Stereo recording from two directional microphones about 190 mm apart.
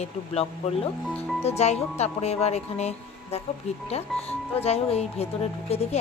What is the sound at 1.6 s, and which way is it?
A woman's voice, 35° left (ahead or behind).